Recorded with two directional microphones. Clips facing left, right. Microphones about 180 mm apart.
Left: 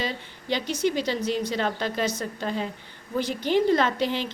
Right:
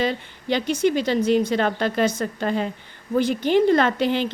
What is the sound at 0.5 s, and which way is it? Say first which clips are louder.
A woman's voice: right 5 dB; 55° right (ahead or behind).